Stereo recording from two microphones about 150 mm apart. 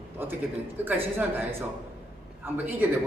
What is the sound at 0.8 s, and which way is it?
Speech, 10° right (ahead or behind).